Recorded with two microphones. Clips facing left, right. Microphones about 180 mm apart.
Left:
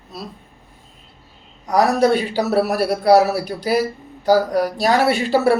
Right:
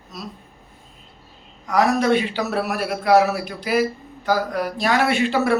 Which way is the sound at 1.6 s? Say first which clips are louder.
Left 3 dB; 35° left (ahead or behind).